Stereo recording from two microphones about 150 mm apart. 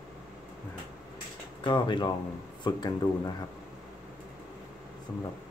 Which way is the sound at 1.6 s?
30° left (ahead or behind).